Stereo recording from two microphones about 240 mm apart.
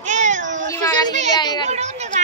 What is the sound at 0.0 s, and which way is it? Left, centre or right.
Cat, right.